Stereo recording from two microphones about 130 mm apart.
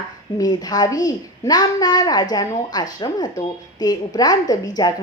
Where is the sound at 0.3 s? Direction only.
30° left (ahead or behind).